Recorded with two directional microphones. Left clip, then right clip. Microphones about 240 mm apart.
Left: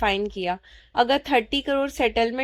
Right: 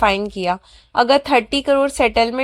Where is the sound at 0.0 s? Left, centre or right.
Right.